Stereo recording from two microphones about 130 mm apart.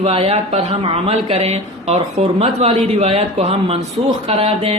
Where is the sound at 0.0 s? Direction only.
50° right (ahead or behind).